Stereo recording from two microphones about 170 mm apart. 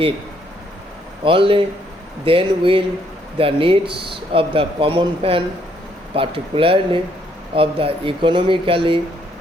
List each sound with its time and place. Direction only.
1.2 s speech: 30° right (ahead or behind)